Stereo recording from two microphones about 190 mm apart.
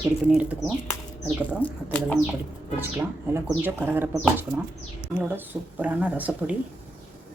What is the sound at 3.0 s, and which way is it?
Speech, 10° right (ahead or behind).